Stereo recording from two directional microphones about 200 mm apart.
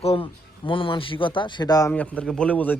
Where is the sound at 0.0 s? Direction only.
30° left (ahead or behind).